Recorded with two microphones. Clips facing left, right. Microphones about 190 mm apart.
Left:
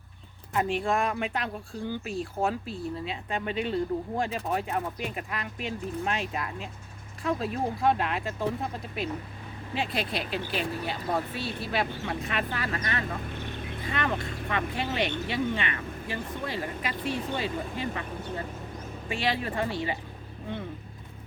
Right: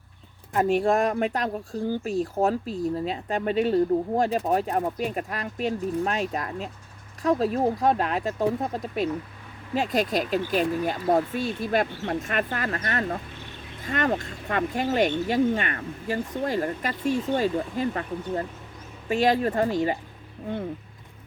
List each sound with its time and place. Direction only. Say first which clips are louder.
0.5 s speech: right 6 dB; 45° right (ahead or behind)